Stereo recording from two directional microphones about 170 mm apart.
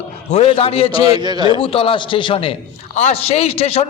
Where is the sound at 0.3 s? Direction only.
40° left (ahead or behind).